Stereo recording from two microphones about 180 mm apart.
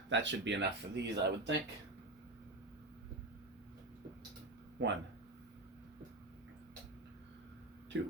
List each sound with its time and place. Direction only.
0.1 s speech: 80° right
4.8 s speech: 80° right
7.9 s speech: 90° right